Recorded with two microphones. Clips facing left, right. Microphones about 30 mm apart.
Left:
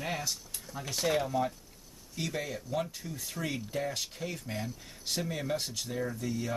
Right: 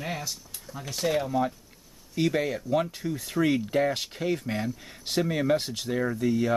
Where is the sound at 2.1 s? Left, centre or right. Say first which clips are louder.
Right 10 dB; right.